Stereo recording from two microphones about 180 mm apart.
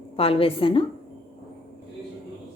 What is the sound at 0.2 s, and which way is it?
Speech, 30° left (ahead or behind).